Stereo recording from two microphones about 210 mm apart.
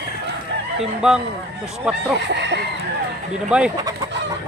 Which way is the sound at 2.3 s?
55° right (ahead or behind).